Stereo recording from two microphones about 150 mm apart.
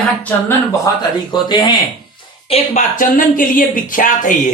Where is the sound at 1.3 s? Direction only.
30° left (ahead or behind).